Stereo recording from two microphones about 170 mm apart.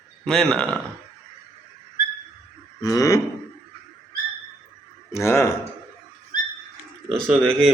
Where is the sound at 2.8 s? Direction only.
20° left (ahead or behind).